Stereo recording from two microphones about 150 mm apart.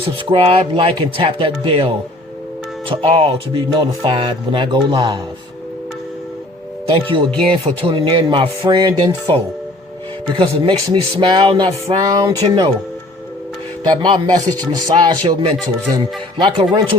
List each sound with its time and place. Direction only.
0.3 s speech: 40° right (ahead or behind)
2.9 s speech: 40° right (ahead or behind)
6.9 s speech: 30° right (ahead or behind)
14.0 s speech: 30° right (ahead or behind)